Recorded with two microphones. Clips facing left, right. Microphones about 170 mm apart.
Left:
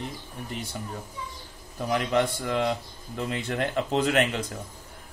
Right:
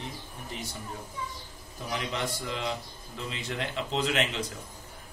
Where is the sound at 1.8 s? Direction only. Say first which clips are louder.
Left 8 dB; 55° left (ahead or behind).